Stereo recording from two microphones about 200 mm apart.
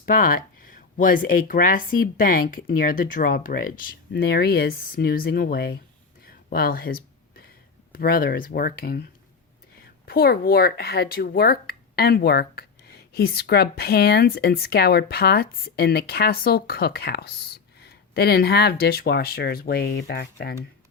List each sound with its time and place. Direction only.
0.0 s speech: 45° left (ahead or behind)
6.2 s a sound: 50° left (ahead or behind)
7.9 s speech: 45° left (ahead or behind)
10.1 s speech: 50° left (ahead or behind)